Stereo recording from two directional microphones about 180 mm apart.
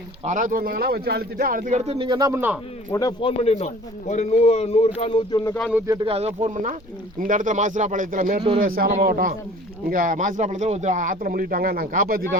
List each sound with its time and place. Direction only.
0.3 s speech: 45° right (ahead or behind); by 2.6 s 10° right (ahead or behind)
2.9 s a man's voice: 20° left (ahead or behind)
5.7 s speech: 15° right (ahead or behind)
6.1 s speech: 35° right (ahead or behind)
8.4 s speech: 30° right (ahead or behind)
8.6 s speech: 50° right (ahead or behind)